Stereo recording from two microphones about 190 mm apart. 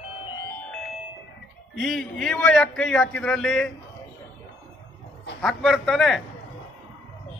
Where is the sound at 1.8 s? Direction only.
Centre (ahead or behind).